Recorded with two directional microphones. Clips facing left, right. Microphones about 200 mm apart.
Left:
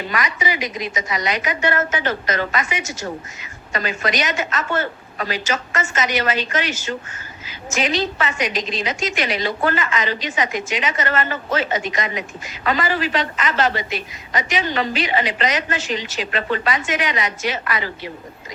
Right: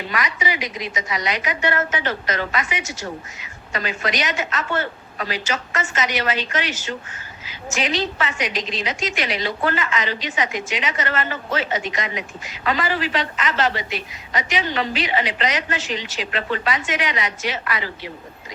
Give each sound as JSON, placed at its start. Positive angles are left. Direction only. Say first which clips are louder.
{"t": 0.1, "sound": "a woman's voice", "louder": "left 1 dB", "side_deg": 45}